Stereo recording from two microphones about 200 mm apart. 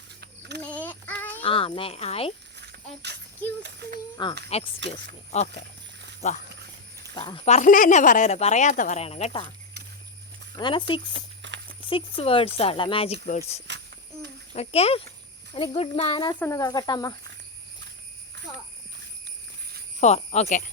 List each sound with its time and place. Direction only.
0.2 s mechanisms: 55° right (ahead or behind)
0.6 s child singing: 10° left (ahead or behind)
1.4 s speech: 25° left (ahead or behind)
2.6 s a sound: 55° right (ahead or behind)
3.6 s speech: 55° right (ahead or behind)
4.4 s speech: 30° left (ahead or behind)
7.2 s speech: 30° left (ahead or behind)
10.5 s speech: 25° left (ahead or behind)
11.4 s horse: 65° right (ahead or behind)
11.9 s speech: 25° left (ahead or behind)
13.7 s a sound: 55° right (ahead or behind)
14.5 s speech: 30° left (ahead or behind)
20.0 s speech: 35° left (ahead or behind)